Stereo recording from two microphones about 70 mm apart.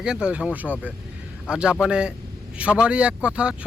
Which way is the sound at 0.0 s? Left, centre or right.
Centre.